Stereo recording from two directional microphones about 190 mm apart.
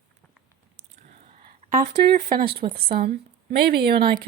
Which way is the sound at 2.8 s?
55° right (ahead or behind).